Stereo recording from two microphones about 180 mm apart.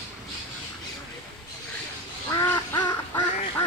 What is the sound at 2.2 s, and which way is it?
Duck, 20° left (ahead or behind).